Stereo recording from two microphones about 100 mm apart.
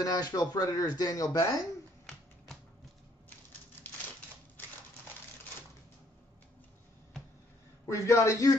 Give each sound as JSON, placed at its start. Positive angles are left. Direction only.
{"t": 0.0, "sound": "speech", "side_deg": 40}
{"t": 4.6, "sound": "a sound", "side_deg": 20}
{"t": 7.9, "sound": "speech", "side_deg": 30}